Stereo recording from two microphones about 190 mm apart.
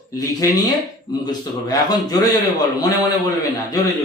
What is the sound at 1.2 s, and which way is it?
Speech, 20° left (ahead or behind).